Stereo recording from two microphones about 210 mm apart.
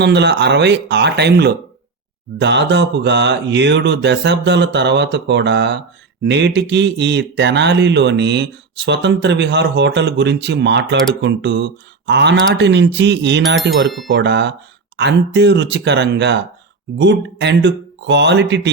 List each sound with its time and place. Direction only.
0.0 s speech: 55° right (ahead or behind)
13.8 s speech: centre (ahead or behind)
14.1 s speech: 60° right (ahead or behind)